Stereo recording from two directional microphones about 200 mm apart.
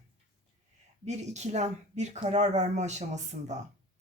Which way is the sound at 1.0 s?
35° right (ahead or behind).